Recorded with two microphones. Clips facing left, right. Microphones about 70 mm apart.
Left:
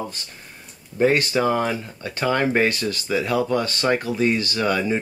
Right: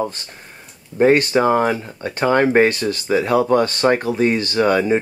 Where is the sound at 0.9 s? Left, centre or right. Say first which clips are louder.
Right 5 dB; right.